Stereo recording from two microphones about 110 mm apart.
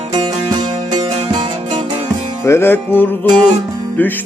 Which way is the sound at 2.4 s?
20° left (ahead or behind).